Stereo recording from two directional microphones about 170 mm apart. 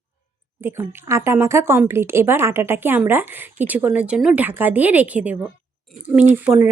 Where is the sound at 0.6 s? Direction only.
15° right (ahead or behind).